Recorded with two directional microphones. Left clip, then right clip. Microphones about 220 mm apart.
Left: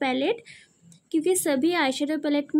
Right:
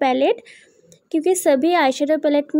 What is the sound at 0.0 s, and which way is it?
Speech, 10° right (ahead or behind).